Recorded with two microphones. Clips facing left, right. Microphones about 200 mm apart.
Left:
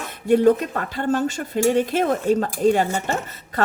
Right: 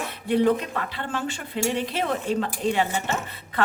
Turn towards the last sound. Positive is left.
turn(degrees=45)  # may be behind; listen again after turning